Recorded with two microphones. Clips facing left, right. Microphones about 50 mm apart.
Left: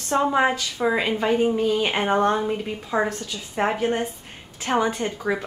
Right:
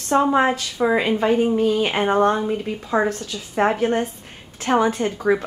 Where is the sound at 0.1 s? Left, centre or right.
Centre.